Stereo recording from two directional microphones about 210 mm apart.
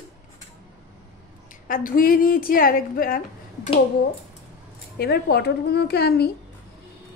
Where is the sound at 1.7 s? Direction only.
40° left (ahead or behind).